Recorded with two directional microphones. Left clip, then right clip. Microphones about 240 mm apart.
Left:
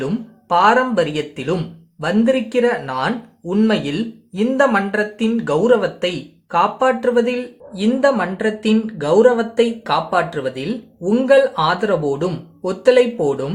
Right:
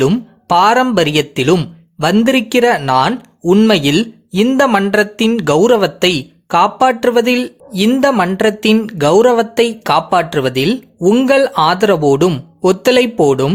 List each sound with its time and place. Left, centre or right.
0.0 s speech: right